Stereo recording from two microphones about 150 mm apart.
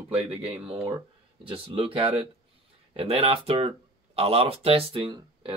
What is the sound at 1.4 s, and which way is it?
Speech, 35° right (ahead or behind).